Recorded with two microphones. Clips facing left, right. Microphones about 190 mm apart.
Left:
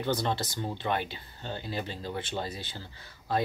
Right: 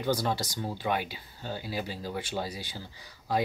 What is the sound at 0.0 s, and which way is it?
Speech, 10° right (ahead or behind).